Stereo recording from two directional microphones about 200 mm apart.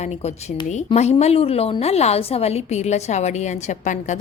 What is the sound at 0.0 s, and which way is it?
A woman's voice, 30° left (ahead or behind).